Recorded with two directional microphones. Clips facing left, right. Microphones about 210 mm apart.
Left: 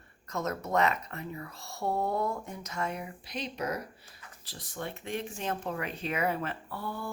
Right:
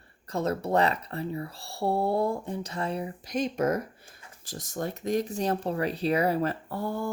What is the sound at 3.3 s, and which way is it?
Speech, 45° right (ahead or behind).